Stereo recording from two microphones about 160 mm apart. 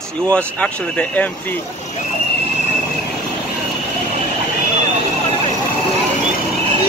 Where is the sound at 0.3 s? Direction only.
5° left (ahead or behind).